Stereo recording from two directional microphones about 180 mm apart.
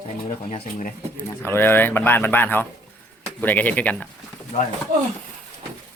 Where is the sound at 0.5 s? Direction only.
45° left (ahead or behind).